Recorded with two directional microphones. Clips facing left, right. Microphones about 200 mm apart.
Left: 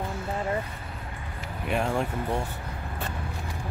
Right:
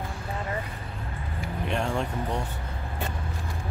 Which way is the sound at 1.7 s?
5° left (ahead or behind).